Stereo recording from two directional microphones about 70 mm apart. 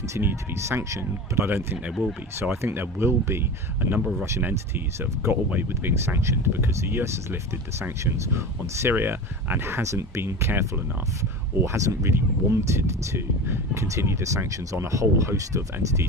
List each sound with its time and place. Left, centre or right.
0.2 s speech: right
1.5 s speech: right
2.4 s speech: right